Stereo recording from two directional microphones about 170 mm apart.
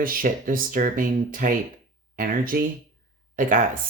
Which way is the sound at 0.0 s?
55° right (ahead or behind).